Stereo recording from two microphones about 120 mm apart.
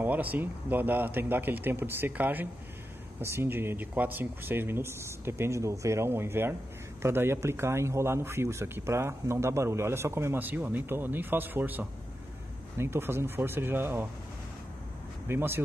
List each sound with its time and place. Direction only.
0.0 s a man's voice: 15° right (ahead or behind)
15.2 s a man's voice: 20° right (ahead or behind)